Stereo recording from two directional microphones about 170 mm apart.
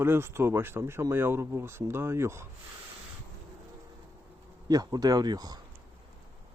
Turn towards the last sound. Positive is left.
turn(degrees=-25)  # may be behind; listen again after turning